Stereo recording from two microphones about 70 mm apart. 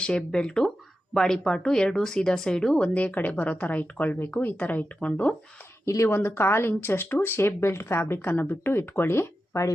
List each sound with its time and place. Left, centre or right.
0.0 s speech: centre
5.8 s speech: left